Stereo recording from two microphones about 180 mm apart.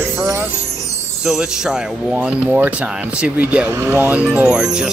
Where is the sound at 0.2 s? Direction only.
15° right (ahead or behind).